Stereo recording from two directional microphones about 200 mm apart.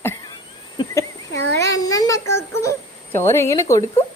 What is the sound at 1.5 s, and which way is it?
A child's voice, 15° left (ahead or behind).